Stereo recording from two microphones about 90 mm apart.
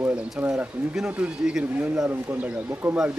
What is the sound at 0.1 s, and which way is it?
Speech, 15° right (ahead or behind).